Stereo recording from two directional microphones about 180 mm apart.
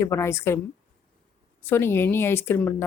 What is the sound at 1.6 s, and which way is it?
Speech, 15° left (ahead or behind).